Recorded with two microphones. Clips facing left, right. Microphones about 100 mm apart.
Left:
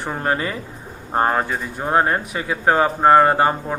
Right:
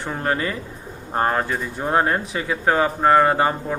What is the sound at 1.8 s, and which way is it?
Speech, 25° left (ahead or behind).